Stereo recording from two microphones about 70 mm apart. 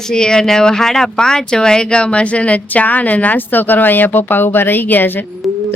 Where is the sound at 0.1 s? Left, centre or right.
Centre.